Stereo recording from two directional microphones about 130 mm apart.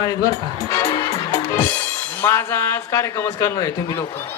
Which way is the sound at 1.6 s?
15° left (ahead or behind).